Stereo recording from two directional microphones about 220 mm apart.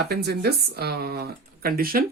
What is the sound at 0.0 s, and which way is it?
Speech, 45° right (ahead or behind).